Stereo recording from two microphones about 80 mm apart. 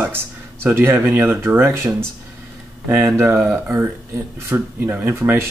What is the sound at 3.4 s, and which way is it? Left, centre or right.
Speech, right.